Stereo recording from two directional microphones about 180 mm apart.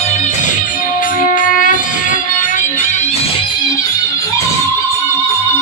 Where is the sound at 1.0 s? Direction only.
50° left (ahead or behind).